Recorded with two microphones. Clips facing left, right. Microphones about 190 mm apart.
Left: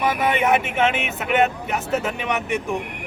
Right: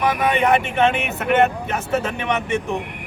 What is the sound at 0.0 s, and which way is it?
Speech, 5° left (ahead or behind).